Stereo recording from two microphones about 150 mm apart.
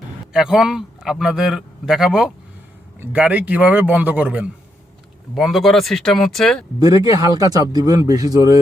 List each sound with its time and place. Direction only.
0.3 s a man's voice: 5° right (ahead or behind)
6.7 s speech: 25° right (ahead or behind)